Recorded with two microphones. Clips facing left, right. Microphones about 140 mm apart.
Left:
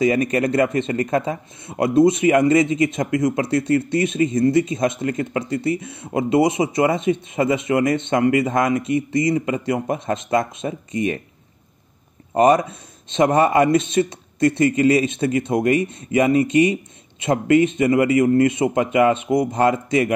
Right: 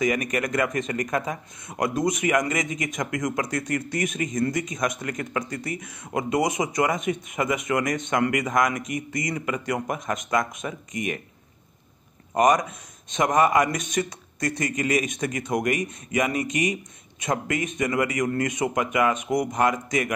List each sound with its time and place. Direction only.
0.0 s speech: 30° left (ahead or behind)
12.4 s speech: 30° left (ahead or behind)